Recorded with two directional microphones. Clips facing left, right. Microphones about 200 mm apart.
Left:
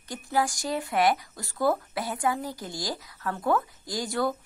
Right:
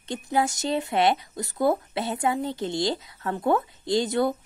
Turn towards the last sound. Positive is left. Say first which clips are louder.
# right 5 dB
turn(degrees=-20)  # may be behind; listen again after turning